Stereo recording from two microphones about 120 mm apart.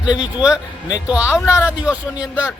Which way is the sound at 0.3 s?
5° right (ahead or behind).